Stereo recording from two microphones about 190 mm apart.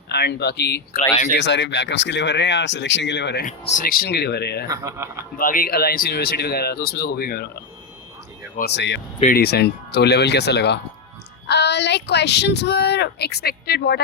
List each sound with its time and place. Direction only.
0.1 s speech: 60° left (ahead or behind)
3.8 s speech: 50° left (ahead or behind)
4.7 s speech: 15° right (ahead or behind)
5.4 s speech: 50° left (ahead or behind)
8.5 s speech: 60° left (ahead or behind)
9.2 s speech: 55° left (ahead or behind)